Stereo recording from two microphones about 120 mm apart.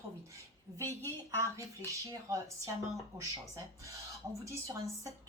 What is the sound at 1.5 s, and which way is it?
A woman's voice, 25° right (ahead or behind).